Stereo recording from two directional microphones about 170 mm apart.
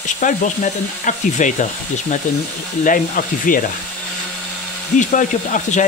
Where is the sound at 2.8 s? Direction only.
50° left (ahead or behind).